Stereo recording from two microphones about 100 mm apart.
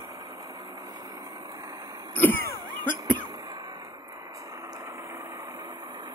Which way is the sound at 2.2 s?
20° left (ahead or behind).